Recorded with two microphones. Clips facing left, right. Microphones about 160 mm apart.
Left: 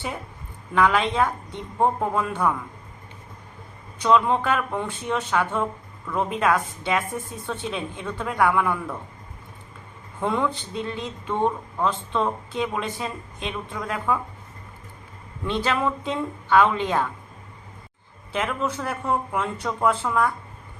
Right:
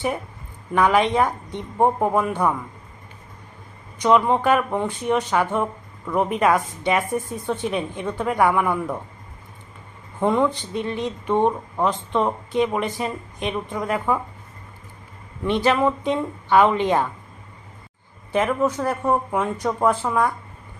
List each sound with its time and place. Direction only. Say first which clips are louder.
0.7 s a woman's voice: right 3 dB; 15° right (ahead or behind)
3.9 s a woman's voice: right 2 dB; 15° right (ahead or behind)
10.2 s a woman's voice: right 5 dB; 20° right (ahead or behind)
15.4 s a woman's voice: right 5 dB; 20° right (ahead or behind)
18.3 s a woman's voice: right 6 dB; 20° right (ahead or behind)